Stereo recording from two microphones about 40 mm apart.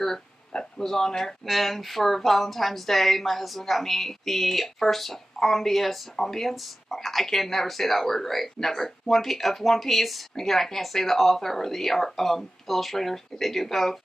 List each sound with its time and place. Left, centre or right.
0.7 s speech: centre